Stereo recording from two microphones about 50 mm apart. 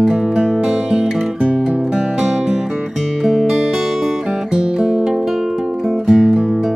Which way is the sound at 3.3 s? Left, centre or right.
Centre.